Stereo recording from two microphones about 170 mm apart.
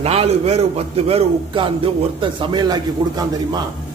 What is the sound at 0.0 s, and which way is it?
A man's voice, 35° right (ahead or behind).